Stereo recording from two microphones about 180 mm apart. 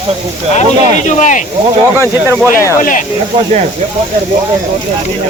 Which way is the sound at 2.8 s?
45° left (ahead or behind).